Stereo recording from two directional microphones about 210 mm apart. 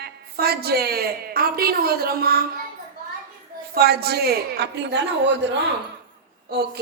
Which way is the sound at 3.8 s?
50° right (ahead or behind).